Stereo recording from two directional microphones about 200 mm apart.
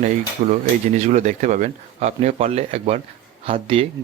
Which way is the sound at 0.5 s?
35° right (ahead or behind).